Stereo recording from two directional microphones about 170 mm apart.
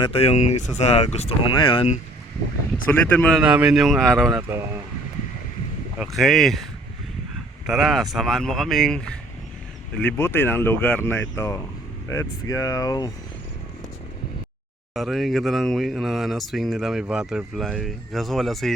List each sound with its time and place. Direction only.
0.0 s speech: 35° left (ahead or behind)
2.8 s speech: 10° left (ahead or behind)
3.4 s speech: 5° right (ahead or behind)
4.4 s speech: 15° right (ahead or behind)
6.0 s speech: centre (ahead or behind)
7.7 s speech: centre (ahead or behind); by 13.1 s 20° left (ahead or behind)
14.9 s speech: centre (ahead or behind)